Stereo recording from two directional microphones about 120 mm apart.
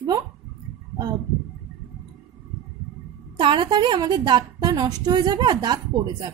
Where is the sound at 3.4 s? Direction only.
40° right (ahead or behind).